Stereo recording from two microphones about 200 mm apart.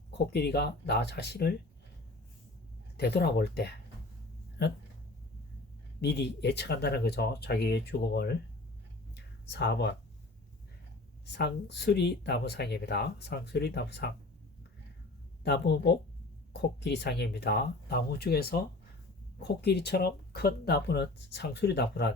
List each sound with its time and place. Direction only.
0.3 s speech: 55° left (ahead or behind)
3.0 s speech: 55° left (ahead or behind)
6.0 s speech: 60° left (ahead or behind)
9.1 s a sound: 60° left (ahead or behind)
11.3 s speech: 60° left (ahead or behind)
15.4 s speech: 55° left (ahead or behind)